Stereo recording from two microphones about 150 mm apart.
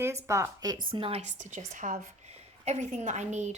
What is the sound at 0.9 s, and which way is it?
A woman's voice, 40° right (ahead or behind).